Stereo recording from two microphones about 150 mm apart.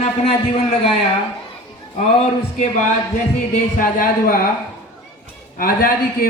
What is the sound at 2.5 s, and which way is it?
Speech, 55° left (ahead or behind).